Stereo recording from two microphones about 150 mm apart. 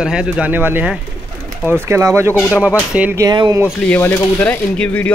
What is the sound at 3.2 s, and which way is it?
Speech, 30° right (ahead or behind).